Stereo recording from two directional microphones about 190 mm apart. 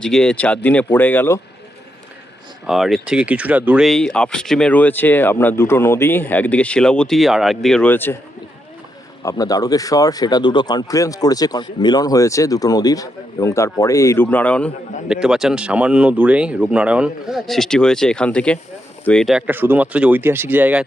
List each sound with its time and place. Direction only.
0.0 s speech: 5° left (ahead or behind)
2.6 s speech: centre (ahead or behind)
9.2 s speech: 20° left (ahead or behind)
15.1 s speech: 5° right (ahead or behind)